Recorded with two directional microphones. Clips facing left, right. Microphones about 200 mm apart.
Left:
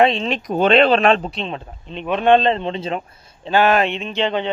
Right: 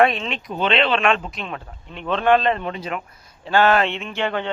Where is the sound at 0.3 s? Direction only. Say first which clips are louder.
Left 6 dB; 45° left (ahead or behind).